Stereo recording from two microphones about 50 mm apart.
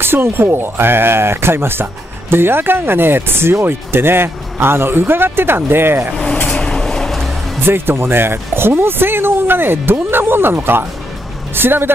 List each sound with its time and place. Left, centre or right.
0.0 s speech: right
6.1 s a sound: centre
7.6 s speech: right